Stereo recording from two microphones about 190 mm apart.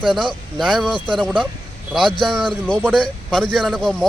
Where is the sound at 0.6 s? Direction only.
Centre (ahead or behind).